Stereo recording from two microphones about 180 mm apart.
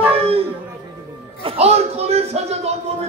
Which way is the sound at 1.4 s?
35° right (ahead or behind).